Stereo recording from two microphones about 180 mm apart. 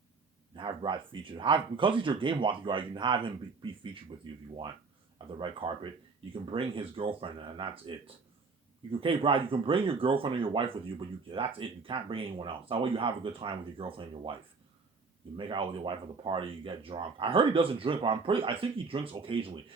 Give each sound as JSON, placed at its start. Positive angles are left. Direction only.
{"t": 0.5, "sound": "speech", "side_deg": -25}
{"t": 5.1, "sound": "speech", "side_deg": -30}
{"t": 15.4, "sound": "speech", "side_deg": -30}